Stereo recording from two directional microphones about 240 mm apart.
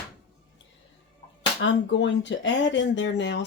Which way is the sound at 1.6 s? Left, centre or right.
Left.